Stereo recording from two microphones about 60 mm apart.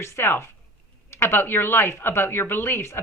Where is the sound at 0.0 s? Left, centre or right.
Left.